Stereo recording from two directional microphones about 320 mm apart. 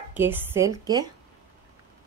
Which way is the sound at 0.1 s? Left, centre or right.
Centre.